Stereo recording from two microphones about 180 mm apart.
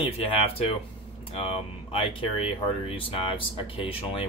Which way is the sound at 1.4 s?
30° left (ahead or behind).